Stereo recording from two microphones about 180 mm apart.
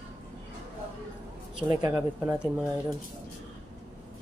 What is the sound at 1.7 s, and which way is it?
Speech, 15° right (ahead or behind).